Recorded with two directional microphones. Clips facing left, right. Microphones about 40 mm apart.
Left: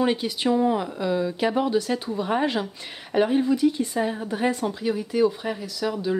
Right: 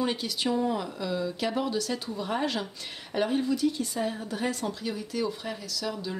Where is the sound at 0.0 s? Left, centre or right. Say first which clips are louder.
Left 6 dB; left.